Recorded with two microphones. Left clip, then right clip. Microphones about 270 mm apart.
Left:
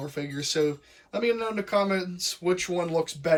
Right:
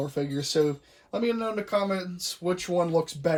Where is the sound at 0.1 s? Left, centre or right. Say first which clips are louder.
Right 2 dB; centre.